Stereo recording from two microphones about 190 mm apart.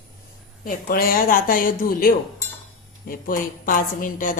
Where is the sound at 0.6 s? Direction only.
50° left (ahead or behind).